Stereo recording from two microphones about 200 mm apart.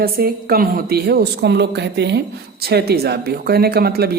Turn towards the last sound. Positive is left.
turn(degrees=-50)  # may be behind; listen again after turning